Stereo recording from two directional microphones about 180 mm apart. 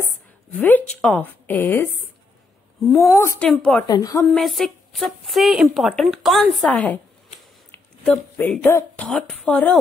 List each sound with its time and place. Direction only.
0.0 s a woman's voice: 10° left (ahead or behind)
2.9 s speech: centre (ahead or behind)
3.2 s a woman's voice: 15° left (ahead or behind)
3.8 s a woman's voice: 20° left (ahead or behind)
4.2 s a woman's voice: centre (ahead or behind)